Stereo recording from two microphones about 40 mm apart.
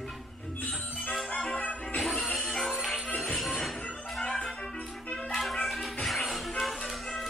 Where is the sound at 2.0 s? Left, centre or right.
Centre.